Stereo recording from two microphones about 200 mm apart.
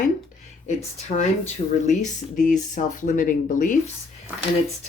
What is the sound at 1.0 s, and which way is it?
Speech, 35° left (ahead or behind).